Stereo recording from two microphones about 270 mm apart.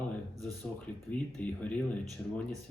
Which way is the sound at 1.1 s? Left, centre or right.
Centre.